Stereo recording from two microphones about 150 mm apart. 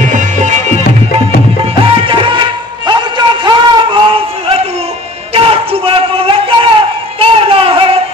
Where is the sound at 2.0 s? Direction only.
35° right (ahead or behind).